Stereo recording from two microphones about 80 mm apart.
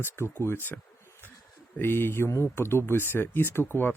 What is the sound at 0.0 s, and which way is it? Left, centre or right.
Speech, left.